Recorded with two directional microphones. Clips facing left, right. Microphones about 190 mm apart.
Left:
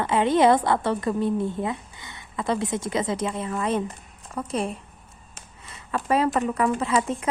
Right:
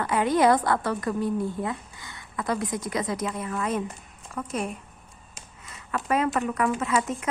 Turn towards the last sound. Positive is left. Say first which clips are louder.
# left 2 dB
turn(degrees=30)  # may be behind; listen again after turning